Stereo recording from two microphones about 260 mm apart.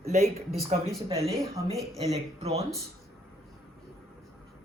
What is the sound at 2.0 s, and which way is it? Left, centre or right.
Speech, right.